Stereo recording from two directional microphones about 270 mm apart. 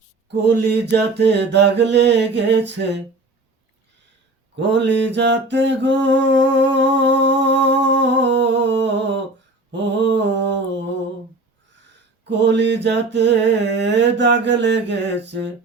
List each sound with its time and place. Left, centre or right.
0.3 s mantra: right
4.5 s mantra: right
12.3 s mantra: right